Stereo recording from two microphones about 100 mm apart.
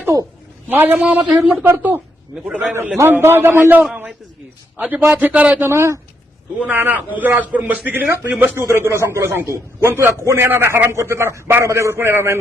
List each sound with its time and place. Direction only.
0.7 s a man's voice: 20° right (ahead or behind)
1.6 s a man's voice: 25° right (ahead or behind)
2.3 s a man's voice: 5° right (ahead or behind)
3.0 s a man's voice: 25° right (ahead or behind)
6.7 s a man's voice: 15° right (ahead or behind)